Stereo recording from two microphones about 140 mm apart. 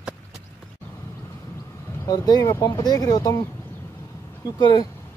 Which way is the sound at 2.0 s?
30° left (ahead or behind).